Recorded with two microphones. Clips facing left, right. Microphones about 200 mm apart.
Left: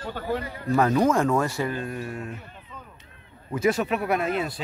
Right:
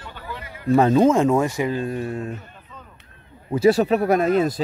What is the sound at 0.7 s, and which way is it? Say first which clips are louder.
Speech: right 5 dB; 25° right (ahead or behind).